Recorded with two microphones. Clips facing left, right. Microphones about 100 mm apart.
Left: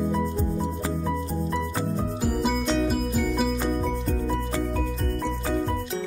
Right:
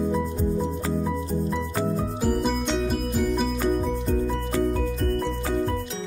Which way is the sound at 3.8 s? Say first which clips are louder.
Right 2 dB; 5° right (ahead or behind).